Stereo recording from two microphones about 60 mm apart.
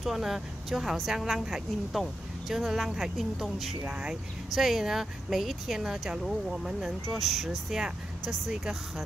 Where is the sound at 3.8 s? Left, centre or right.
Centre.